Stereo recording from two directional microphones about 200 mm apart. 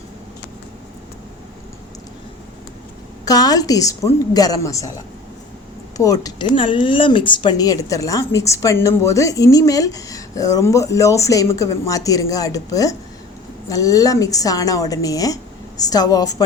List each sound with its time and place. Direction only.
3.2 s speech: 20° left (ahead or behind)
6.0 s speech: 15° left (ahead or behind)